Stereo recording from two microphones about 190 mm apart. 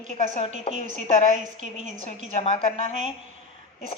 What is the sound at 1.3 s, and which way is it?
Speech, 40° right (ahead or behind).